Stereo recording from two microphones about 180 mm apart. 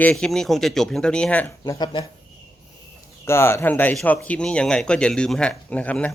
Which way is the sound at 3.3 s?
15° left (ahead or behind).